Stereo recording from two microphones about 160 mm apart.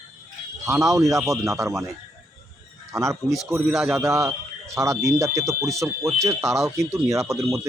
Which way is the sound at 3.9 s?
20° right (ahead or behind).